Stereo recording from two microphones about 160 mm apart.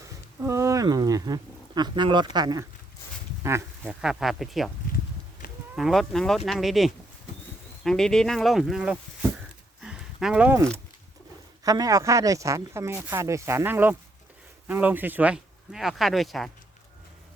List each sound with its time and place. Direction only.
0.4 s speech: 20° right (ahead or behind)
3.8 s speech: 5° right (ahead or behind)
5.7 s speech: centre (ahead or behind)
9.8 s a sound: 5° right (ahead or behind)
11.6 s speech: 20° right (ahead or behind); by 16.5 s centre (ahead or behind)